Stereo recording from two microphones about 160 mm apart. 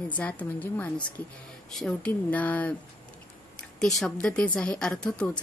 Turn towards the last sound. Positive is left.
turn(degrees=5)  # may be behind; listen again after turning